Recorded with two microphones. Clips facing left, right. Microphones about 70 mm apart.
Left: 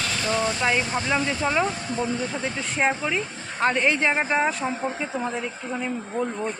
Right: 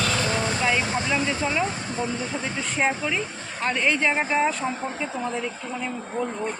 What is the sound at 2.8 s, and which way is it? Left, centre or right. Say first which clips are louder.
Speech: left 1 dB; centre.